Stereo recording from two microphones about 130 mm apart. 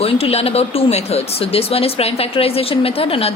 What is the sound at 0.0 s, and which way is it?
A woman's voice, 50° left (ahead or behind).